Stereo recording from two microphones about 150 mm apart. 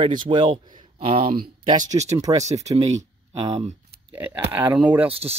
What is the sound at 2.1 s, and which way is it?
Speech, 20° right (ahead or behind).